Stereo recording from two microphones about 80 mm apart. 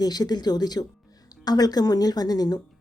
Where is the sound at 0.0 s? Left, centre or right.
Left.